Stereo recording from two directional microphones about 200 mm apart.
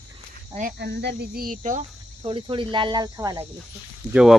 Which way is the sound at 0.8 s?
55° right (ahead or behind).